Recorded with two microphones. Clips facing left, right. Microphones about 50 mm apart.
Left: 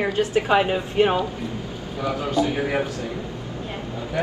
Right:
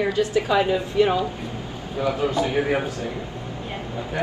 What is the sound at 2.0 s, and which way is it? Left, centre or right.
Speech, right.